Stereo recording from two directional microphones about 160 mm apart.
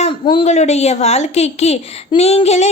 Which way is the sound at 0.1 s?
30° left (ahead or behind).